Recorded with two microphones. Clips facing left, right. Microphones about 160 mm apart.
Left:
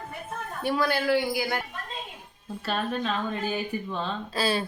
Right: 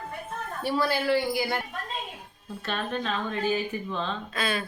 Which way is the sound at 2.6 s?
Centre (ahead or behind).